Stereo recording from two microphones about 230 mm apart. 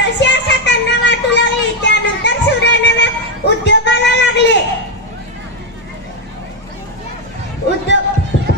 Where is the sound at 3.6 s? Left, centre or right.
Left.